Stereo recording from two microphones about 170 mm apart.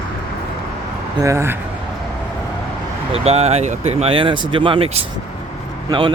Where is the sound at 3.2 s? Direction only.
40° right (ahead or behind).